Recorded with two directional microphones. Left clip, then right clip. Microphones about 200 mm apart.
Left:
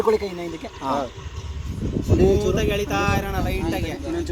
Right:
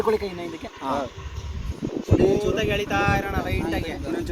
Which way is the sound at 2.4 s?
45° left (ahead or behind).